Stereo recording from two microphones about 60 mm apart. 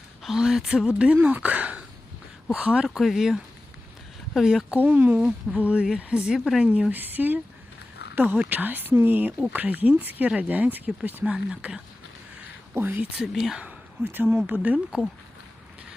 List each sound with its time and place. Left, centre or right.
0.2 s speech: centre
3.0 s speech: centre
4.7 s speech: right
5.5 s speech: right
6.7 s speech: right
10.2 s speech: centre
12.7 s speech: right
13.1 s speech: centre
14.0 s speech: right